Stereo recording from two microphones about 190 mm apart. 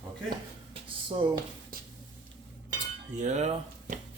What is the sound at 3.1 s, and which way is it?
Cutlery, 40° right (ahead or behind).